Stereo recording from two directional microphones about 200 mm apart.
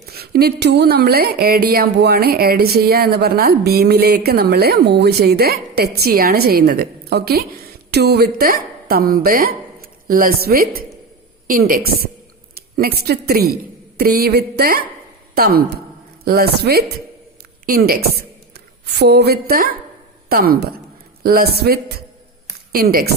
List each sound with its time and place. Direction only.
0.0 s a woman's voice: 50° right (ahead or behind)